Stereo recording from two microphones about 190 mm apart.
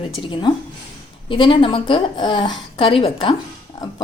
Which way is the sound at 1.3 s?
25° left (ahead or behind).